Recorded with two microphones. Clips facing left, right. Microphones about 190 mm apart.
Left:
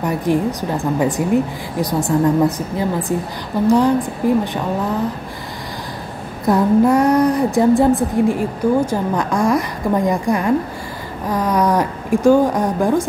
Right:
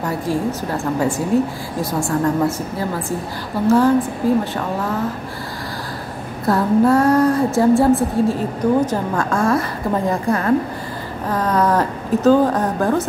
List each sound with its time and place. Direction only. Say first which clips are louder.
0.0 s a woman's voice: left 3 dB; 20° left (ahead or behind)
6.4 s a woman's voice: left 2 dB; 15° left (ahead or behind)